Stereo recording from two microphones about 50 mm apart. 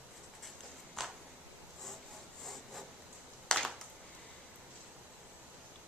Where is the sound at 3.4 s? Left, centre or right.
Centre.